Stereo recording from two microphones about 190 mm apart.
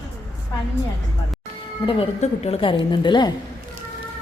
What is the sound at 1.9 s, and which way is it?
A woman's voice, 30° left (ahead or behind).